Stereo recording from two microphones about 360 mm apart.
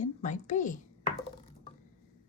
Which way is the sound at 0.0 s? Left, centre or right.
Left.